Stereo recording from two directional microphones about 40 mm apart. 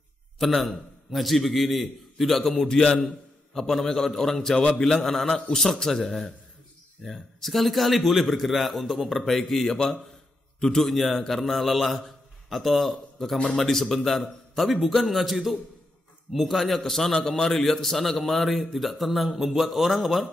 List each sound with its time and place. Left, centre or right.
0.4 s a man's voice: centre
10.9 s a man's voice: centre